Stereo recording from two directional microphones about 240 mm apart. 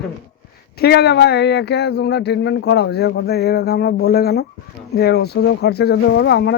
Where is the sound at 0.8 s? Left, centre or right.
Left.